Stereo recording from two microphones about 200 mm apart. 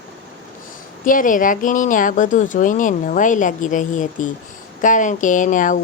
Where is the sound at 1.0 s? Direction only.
40° left (ahead or behind).